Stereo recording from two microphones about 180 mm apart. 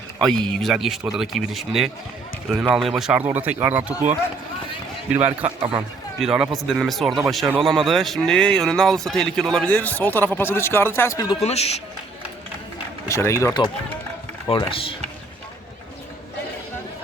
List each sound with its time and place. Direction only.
0.2 s a man's voice: 5° left (ahead or behind)
5.1 s a man's voice: 10° right (ahead or behind); by 11.3 s 20° left (ahead or behind)
11.4 s speech: 35° left (ahead or behind)
13.1 s speech: 15° left (ahead or behind)
14.5 s speech: 30° left (ahead or behind)